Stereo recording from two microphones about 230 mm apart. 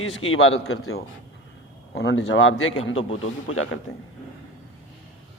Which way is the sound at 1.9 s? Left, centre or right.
Left.